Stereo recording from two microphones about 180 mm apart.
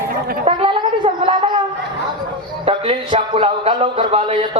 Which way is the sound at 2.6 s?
30° right (ahead or behind).